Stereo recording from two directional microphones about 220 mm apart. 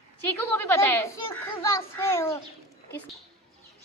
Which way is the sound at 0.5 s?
10° left (ahead or behind).